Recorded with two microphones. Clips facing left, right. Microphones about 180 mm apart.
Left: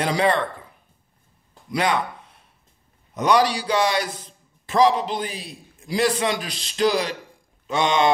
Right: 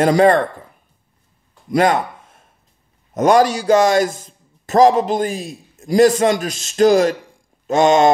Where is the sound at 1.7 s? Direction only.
45° right (ahead or behind).